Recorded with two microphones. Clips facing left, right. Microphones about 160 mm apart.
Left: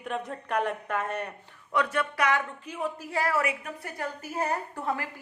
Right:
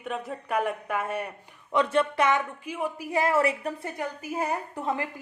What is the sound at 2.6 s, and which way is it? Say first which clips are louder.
A woman's voice: right 2 dB; 10° right (ahead or behind).